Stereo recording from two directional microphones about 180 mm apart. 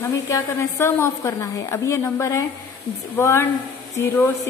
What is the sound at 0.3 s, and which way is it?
A woman's voice, 15° left (ahead or behind).